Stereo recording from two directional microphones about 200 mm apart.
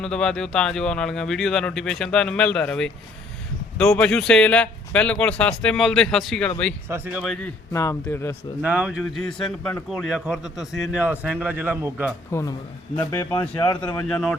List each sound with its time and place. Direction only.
0.0 s speech: 5° left (ahead or behind)
6.8 s speech: 10° right (ahead or behind)
7.7 s speech: 15° left (ahead or behind)
8.6 s speech: 5° right (ahead or behind)
12.3 s speech: 15° left (ahead or behind)
13.6 s speech: 20° left (ahead or behind)
14.1 s speech: centre (ahead or behind)